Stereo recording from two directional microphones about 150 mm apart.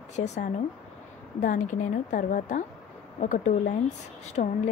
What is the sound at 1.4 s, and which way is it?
A woman's voice, 60° left (ahead or behind).